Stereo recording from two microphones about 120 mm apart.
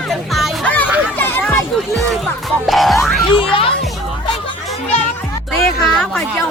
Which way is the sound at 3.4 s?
50° left (ahead or behind).